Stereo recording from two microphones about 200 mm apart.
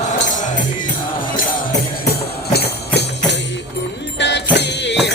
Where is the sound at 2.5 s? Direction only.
55° left (ahead or behind).